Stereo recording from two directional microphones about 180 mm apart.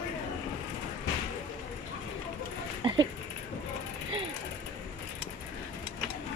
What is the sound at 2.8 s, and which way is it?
Speech, 25° right (ahead or behind).